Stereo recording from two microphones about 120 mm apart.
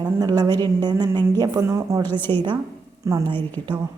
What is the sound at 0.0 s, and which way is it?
A woman's voice, 35° right (ahead or behind).